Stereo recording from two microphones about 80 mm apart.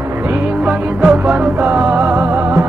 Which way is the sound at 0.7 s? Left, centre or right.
Centre.